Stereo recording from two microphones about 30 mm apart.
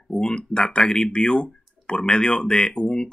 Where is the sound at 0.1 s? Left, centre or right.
Left.